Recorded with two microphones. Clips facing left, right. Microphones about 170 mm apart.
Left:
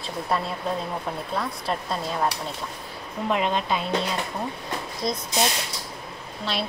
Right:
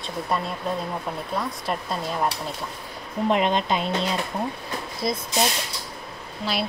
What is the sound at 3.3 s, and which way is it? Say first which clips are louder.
Speech: right 2 dB; 20° right (ahead or behind).